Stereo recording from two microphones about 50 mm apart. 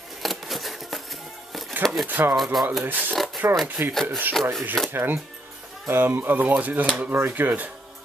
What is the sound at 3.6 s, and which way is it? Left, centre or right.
Speech, right.